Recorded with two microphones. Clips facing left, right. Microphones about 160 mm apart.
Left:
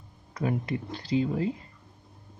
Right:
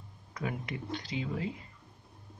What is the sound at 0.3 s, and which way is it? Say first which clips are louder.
Speech: left 8 dB; 40° left (ahead or behind).